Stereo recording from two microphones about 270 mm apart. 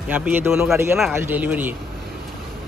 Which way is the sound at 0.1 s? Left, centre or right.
Centre.